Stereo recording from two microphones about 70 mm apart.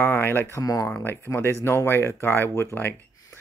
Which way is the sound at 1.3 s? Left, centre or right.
Left.